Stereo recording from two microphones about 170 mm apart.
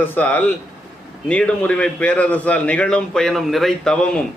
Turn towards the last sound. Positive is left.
turn(degrees=5)  # may be behind; listen again after turning